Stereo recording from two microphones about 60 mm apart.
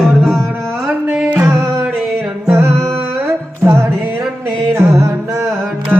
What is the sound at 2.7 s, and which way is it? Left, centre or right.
Music, right.